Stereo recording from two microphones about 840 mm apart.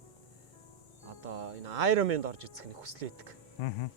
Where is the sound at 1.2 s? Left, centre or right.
Right.